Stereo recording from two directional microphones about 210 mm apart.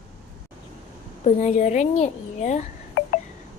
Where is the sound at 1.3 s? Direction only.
35° left (ahead or behind).